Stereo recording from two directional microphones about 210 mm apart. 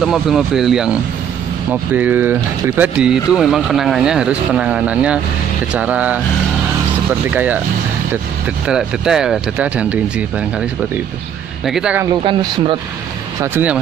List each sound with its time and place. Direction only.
0.0 s speech: centre (ahead or behind)
7.2 s speech: 10° right (ahead or behind)
8.6 s speech: 5° right (ahead or behind)
11.6 s speech: 5° right (ahead or behind)
12.3 s speech: 25° right (ahead or behind)
13.4 s speech: 10° right (ahead or behind)